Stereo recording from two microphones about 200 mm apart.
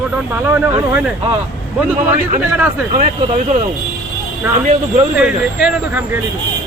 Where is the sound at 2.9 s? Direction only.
40° right (ahead or behind).